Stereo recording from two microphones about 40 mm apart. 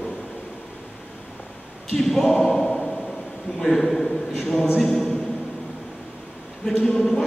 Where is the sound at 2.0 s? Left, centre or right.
Centre.